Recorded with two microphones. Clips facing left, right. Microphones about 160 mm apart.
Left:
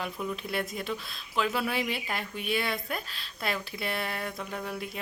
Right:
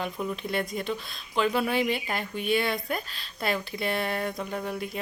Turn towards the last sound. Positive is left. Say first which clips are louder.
# right 4 dB
turn(degrees=0)  # may be behind; listen again after turning